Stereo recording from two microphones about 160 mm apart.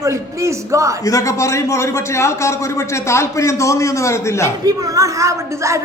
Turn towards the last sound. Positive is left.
turn(degrees=-20)  # may be behind; listen again after turning